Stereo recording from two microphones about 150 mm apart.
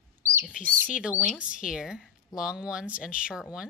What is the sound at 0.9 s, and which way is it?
Speech, 10° right (ahead or behind).